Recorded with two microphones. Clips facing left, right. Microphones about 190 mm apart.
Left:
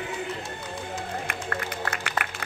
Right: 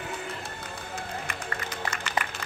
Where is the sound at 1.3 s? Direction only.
60° left (ahead or behind).